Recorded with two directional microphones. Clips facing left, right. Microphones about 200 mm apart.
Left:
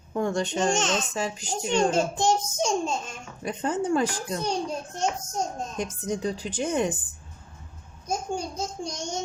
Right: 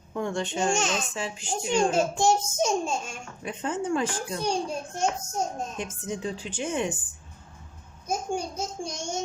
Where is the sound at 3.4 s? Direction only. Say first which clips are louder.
Left 3 dB; 40° left (ahead or behind).